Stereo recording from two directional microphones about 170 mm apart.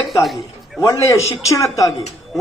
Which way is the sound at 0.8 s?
15° left (ahead or behind).